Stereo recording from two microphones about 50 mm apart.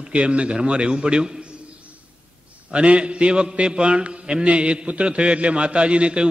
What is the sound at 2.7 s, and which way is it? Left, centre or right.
Mantra, right.